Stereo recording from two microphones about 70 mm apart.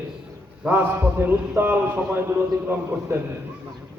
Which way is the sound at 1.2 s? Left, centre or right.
Right.